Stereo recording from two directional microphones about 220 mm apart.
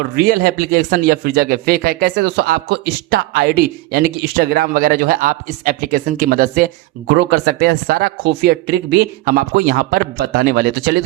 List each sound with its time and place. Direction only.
0.2 s a man's voice: 40° right (ahead or behind)